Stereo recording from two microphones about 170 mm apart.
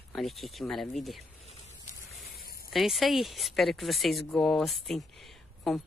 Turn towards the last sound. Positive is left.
turn(degrees=0)  # may be behind; listen again after turning